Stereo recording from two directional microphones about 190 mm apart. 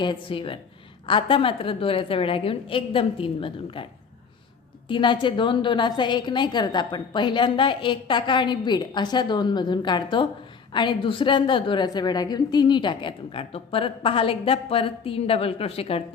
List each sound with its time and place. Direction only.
0.0 s a woman's voice: 25° left (ahead or behind)
4.9 s a woman's voice: 25° left (ahead or behind)